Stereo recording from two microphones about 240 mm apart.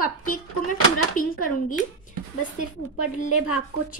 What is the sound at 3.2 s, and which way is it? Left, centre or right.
Speech, left.